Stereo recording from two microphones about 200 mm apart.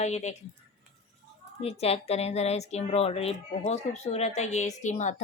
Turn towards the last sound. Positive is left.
turn(degrees=35)  # may be behind; listen again after turning